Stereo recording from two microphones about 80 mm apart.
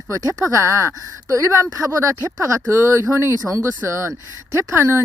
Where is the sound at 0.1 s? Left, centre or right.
Right.